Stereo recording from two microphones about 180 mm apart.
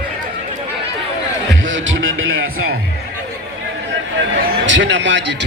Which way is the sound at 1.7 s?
90° right.